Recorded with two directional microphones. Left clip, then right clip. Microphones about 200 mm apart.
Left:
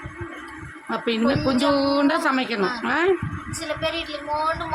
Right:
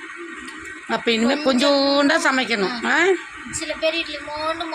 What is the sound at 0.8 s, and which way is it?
A man's voice, 5° right (ahead or behind).